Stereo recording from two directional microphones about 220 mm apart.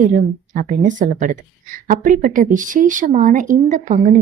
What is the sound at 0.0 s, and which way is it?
Speech, 35° right (ahead or behind).